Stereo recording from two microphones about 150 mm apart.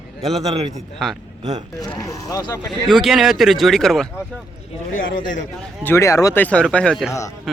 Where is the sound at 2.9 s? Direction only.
Centre (ahead or behind).